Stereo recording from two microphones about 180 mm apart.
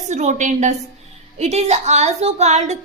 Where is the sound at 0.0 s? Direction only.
40° right (ahead or behind).